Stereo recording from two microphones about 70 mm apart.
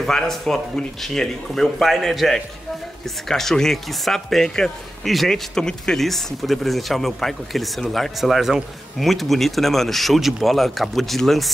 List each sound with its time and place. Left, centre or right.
0.0 s speech: centre